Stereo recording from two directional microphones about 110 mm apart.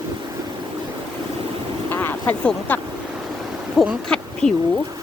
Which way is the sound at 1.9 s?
20° left (ahead or behind).